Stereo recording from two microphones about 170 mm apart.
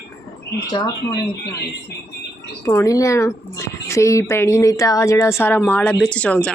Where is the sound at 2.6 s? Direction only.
20° left (ahead or behind).